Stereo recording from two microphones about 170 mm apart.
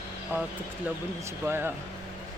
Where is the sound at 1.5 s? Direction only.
15° right (ahead or behind).